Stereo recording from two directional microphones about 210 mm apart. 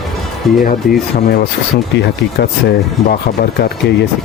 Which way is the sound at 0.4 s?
Centre (ahead or behind).